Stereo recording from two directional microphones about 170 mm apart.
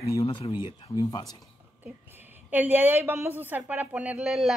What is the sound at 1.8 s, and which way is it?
A woman's voice, 10° right (ahead or behind).